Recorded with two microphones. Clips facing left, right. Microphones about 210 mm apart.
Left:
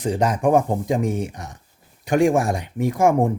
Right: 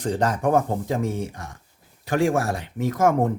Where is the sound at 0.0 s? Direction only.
10° left (ahead or behind).